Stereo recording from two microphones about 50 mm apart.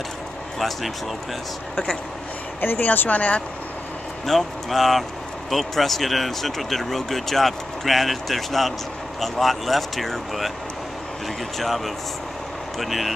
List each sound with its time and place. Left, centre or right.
0.6 s speech: centre
2.6 s speech: left
4.3 s speech: centre
11.5 s speech: centre